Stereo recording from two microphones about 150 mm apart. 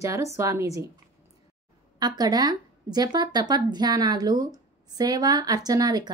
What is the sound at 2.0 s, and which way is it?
A woman's voice, 25° right (ahead or behind).